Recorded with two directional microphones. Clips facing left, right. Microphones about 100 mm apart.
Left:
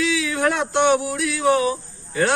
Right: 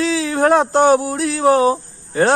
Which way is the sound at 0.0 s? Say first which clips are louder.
Right 4 dB; 35° right (ahead or behind).